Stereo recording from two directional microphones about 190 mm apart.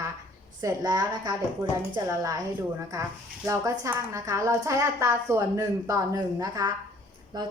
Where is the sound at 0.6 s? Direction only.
20° right (ahead or behind).